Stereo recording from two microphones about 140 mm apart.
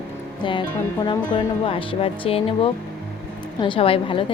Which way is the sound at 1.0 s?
35° left (ahead or behind).